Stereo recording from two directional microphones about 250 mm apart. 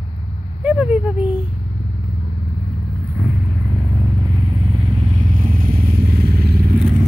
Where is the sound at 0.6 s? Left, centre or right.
Centre.